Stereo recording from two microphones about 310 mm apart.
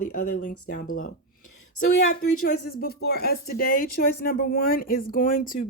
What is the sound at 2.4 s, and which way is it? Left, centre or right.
Speech, left.